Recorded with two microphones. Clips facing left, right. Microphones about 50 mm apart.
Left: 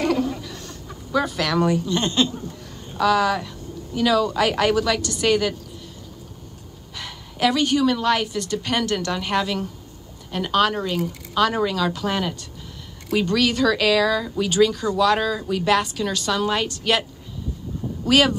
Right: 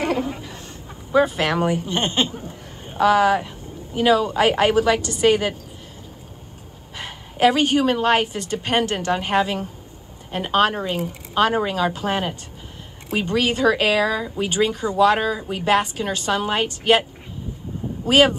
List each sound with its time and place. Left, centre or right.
0.0 s a woman's voice: right
7.0 s speech: right
18.0 s speech: right